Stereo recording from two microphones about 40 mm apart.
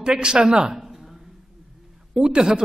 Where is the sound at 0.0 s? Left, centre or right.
Right.